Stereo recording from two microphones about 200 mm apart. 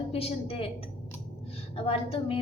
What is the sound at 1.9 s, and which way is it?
Speech, 30° left (ahead or behind).